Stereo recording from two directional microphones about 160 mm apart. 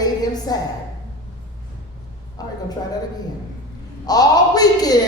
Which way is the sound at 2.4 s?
25° left (ahead or behind).